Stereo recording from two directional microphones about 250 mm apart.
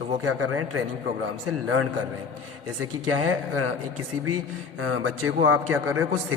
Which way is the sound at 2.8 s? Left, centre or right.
Right.